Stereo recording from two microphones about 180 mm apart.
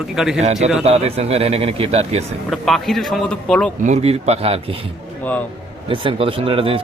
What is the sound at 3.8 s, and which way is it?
Speech, 35° right (ahead or behind).